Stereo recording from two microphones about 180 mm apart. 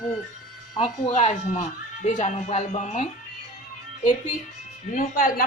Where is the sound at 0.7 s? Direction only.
40° left (ahead or behind).